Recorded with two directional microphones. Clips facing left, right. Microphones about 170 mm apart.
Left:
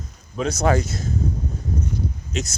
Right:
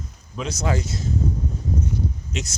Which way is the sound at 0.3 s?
55° left (ahead or behind).